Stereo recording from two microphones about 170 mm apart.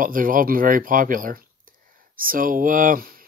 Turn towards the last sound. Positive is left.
turn(degrees=-55)  # may be behind; listen again after turning